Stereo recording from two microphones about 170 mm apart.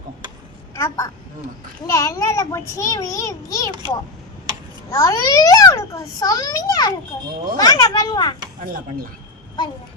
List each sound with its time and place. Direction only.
0.8 s a child's voice: 20° left (ahead or behind)
4.9 s a child's voice: 20° left (ahead or behind)
8.6 s speech: 55° right (ahead or behind)